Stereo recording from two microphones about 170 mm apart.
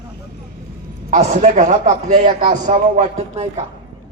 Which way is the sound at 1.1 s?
40° right (ahead or behind).